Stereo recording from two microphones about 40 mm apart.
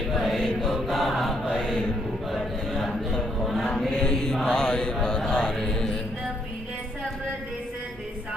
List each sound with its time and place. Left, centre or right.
0.1 s chant: centre
1.5 s mantra: centre
2.6 s a sound: centre
3.4 s mantra: centre
3.8 s chant: centre
4.4 s mantra: left